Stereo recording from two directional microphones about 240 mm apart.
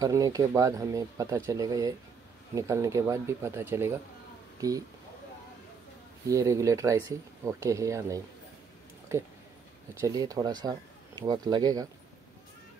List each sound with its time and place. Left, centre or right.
0.0 s speech: centre
6.2 s speech: centre
9.9 s speech: centre